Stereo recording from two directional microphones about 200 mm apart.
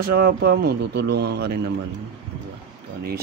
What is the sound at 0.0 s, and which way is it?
Speech, 45° right (ahead or behind).